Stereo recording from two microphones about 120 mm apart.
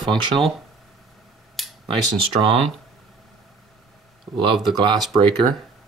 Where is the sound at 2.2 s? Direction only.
50° right (ahead or behind).